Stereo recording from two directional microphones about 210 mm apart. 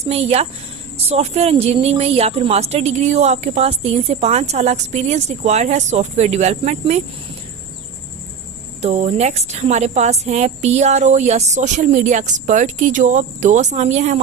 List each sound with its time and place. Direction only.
0.0 s a woman's voice: 30° right (ahead or behind)
8.8 s a woman's voice: 30° right (ahead or behind)